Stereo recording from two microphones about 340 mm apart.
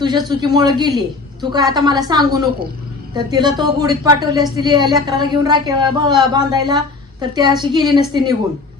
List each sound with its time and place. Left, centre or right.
0.0 s speech: centre